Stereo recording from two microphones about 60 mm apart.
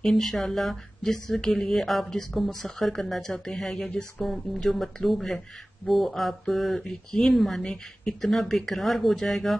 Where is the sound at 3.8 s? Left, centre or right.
Left.